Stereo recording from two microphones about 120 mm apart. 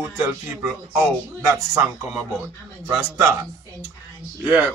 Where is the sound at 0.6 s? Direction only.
15° right (ahead or behind).